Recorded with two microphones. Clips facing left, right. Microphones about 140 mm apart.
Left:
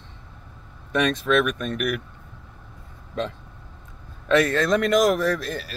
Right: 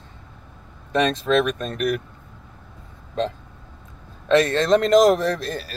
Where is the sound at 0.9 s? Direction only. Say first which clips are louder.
Right 2 dB; 30° right (ahead or behind).